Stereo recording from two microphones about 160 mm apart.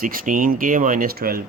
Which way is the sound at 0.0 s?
60° right (ahead or behind).